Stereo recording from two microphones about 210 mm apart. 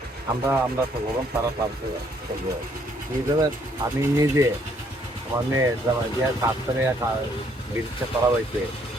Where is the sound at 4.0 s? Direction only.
15° right (ahead or behind).